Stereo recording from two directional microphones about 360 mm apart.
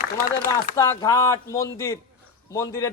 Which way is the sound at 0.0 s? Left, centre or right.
Left.